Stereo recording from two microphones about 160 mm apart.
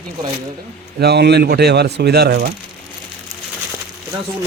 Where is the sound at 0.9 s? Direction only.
90° right.